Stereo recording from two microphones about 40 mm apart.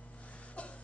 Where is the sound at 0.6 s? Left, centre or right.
Left.